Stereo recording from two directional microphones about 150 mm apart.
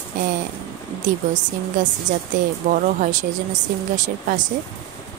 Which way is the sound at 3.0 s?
55° right (ahead or behind).